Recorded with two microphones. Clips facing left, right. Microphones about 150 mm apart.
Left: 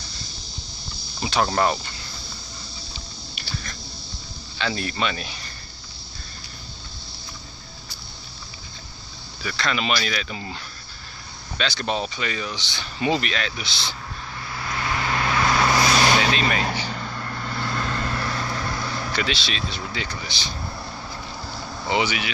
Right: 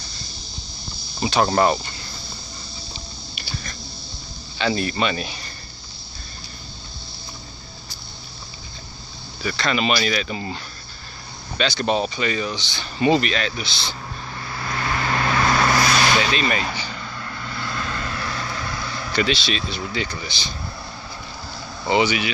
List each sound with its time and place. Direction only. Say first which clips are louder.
1.2 s speech: right 3 dB; 5° right (ahead or behind)
3.3 s a sound: even; 5° right (ahead or behind)
4.6 s speech: right 4 dB; 5° right (ahead or behind)
9.4 s speech: right 4 dB; centre (ahead or behind)
14.5 s vehicle: right 2 dB; 10° left (ahead or behind)
16.2 s speech: right 1 dB; centre (ahead or behind)
16.9 s vehicle: left 2 dB; 45° left (ahead or behind)
19.1 s speech: right 8 dB; centre (ahead or behind)
21.8 s speech: right 4 dB; centre (ahead or behind)